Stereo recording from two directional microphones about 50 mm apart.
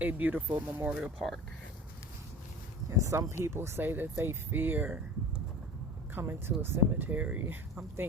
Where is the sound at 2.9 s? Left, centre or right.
Right.